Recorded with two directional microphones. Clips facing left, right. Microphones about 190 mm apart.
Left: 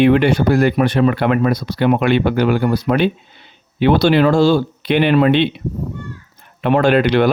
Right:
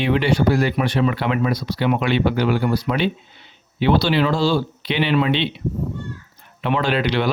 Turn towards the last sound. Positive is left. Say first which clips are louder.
# left 7 dB
turn(degrees=50)  # may be behind; listen again after turning